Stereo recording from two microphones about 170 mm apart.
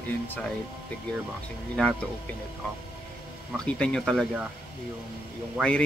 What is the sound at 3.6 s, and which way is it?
Speech, 5° left (ahead or behind).